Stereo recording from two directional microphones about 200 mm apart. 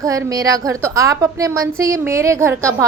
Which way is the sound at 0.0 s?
15° right (ahead or behind).